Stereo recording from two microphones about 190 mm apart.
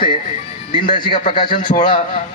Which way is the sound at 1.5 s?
50° left (ahead or behind).